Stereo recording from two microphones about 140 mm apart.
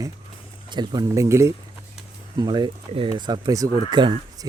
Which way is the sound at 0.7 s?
30° right (ahead or behind).